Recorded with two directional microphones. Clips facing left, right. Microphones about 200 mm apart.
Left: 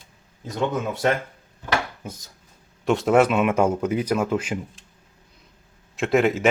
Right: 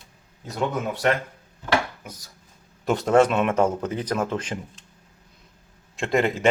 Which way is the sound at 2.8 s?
Centre (ahead or behind).